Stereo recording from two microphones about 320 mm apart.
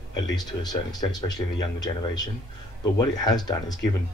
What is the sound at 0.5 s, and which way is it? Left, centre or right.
Speech, centre.